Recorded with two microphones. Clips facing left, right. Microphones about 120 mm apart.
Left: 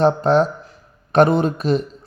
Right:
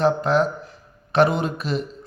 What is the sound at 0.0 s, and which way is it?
Speech, 35° left (ahead or behind).